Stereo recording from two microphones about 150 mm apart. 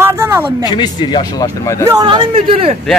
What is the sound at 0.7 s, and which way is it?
Speech, 30° left (ahead or behind).